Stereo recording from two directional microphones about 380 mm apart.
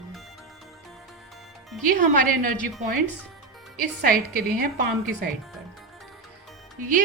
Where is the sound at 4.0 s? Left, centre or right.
Right.